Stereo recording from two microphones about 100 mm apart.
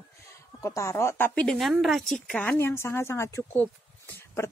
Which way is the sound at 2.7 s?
25° left (ahead or behind).